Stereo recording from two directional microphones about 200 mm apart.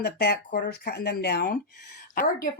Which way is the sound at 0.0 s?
50° left (ahead or behind).